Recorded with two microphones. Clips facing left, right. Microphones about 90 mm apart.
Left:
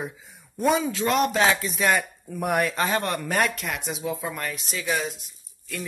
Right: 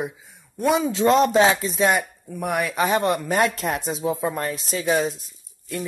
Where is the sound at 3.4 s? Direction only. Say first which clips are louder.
Right 4 dB; 35° right (ahead or behind).